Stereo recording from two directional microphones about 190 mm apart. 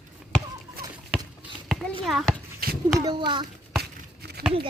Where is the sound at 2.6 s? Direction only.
50° right (ahead or behind).